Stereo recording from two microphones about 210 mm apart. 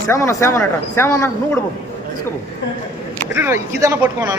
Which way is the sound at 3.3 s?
10° right (ahead or behind).